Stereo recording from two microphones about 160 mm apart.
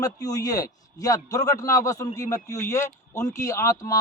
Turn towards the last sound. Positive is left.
turn(degrees=20)  # may be behind; listen again after turning